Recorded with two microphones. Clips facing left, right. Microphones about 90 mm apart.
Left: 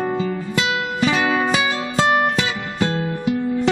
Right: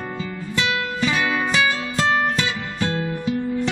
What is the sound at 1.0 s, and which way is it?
Music, 35° left (ahead or behind).